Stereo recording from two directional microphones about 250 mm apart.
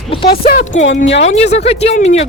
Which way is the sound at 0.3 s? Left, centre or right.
Left.